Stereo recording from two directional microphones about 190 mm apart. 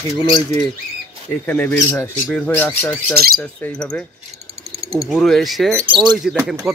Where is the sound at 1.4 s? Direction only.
10° left (ahead or behind).